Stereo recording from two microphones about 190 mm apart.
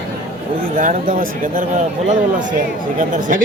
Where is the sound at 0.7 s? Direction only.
45° right (ahead or behind).